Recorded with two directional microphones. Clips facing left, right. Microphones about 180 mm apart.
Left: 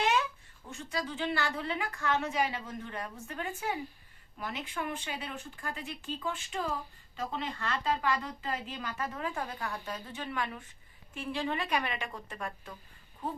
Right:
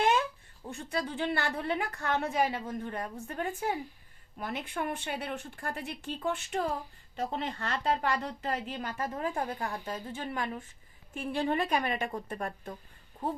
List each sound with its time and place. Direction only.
0.0 s a sound: 50° right (ahead or behind)
0.7 s speech: 55° right (ahead or behind); by 3.8 s 40° right (ahead or behind)
4.4 s speech: 50° right (ahead or behind)
7.3 s speech: 45° right (ahead or behind)
8.9 s a woman's voice: 40° right (ahead or behind)
11.1 s speech: 50° right (ahead or behind)
11.6 s a woman's voice: 40° right (ahead or behind)